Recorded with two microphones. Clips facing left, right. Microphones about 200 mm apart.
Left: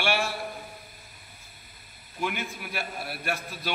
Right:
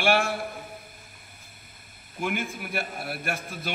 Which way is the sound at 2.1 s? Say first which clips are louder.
Right 2 dB; 50° right (ahead or behind).